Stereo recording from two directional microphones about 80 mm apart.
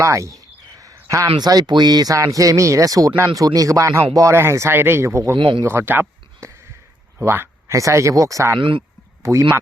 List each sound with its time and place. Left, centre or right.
0.0 s a sound: right
1.4 s speech: right
2.1 s speech: right
5.4 s speech: right
5.6 s speech: right
8.5 s speech: right